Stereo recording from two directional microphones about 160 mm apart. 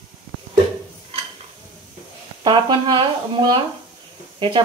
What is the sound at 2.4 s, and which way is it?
Speech, 30° right (ahead or behind).